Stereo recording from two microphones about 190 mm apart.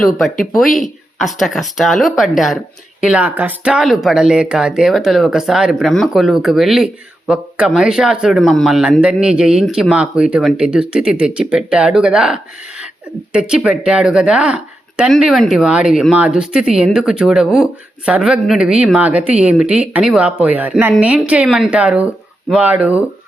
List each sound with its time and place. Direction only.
0.0 s speech: centre (ahead or behind)